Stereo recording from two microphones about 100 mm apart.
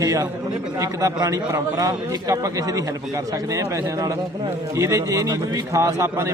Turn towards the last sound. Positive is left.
turn(degrees=-30)  # may be behind; listen again after turning